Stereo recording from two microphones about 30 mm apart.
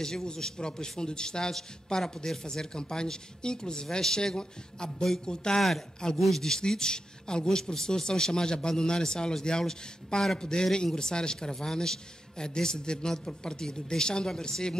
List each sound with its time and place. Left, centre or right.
0.0 s a man's voice: left
5.6 s speech: centre
6.8 s a man's voice: left